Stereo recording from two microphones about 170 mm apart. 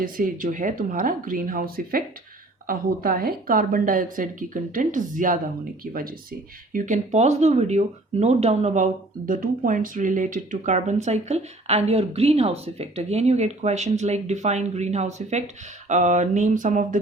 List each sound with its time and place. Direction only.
0.0 s speech: 55° right (ahead or behind)
6.7 s speech: 45° right (ahead or behind)